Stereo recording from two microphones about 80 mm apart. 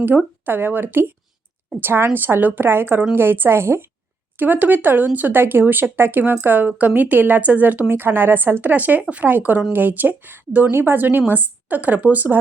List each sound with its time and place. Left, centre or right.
0.4 s speech: right